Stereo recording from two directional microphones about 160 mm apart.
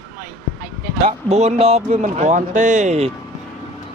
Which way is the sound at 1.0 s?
40° right (ahead or behind).